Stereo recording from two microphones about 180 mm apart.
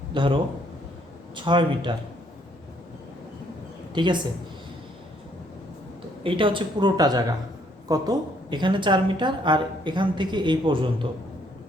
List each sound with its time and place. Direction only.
0.1 s a man's voice: 25° right (ahead or behind)
1.4 s a woman's voice: 25° right (ahead or behind)
3.9 s a woman's voice: 25° right (ahead or behind)
6.2 s a woman's voice: 30° right (ahead or behind)